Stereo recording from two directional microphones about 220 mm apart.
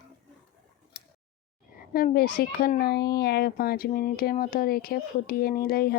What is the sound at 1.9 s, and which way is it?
A woman's voice, 40° left (ahead or behind).